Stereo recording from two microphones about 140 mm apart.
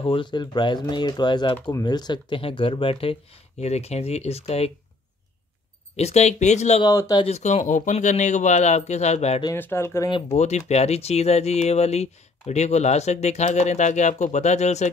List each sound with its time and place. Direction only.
0.0 s speech: 35° left (ahead or behind)
3.6 s speech: 50° left (ahead or behind)
5.9 s speech: 50° left (ahead or behind)
6.8 s speech: 30° left (ahead or behind)
7.2 s speech: 50° left (ahead or behind)
9.6 s speech: 15° left (ahead or behind)
10.3 s speech: 50° left (ahead or behind)